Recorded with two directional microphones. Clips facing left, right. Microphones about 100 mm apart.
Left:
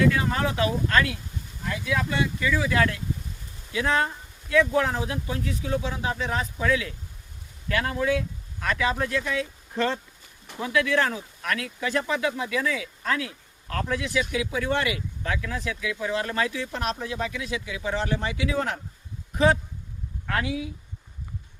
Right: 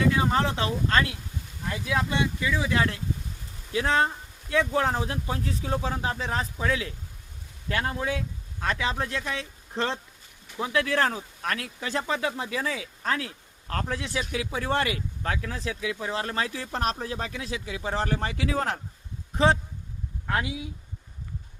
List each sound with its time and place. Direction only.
0.1 s speech: 25° right (ahead or behind)
20.2 s speech: 20° right (ahead or behind)